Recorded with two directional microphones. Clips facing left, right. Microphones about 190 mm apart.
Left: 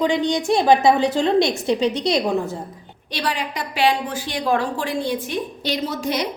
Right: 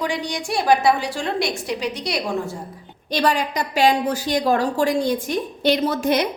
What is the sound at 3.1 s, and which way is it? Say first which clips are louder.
A woman's voice: right 5 dB; 45° right (ahead or behind).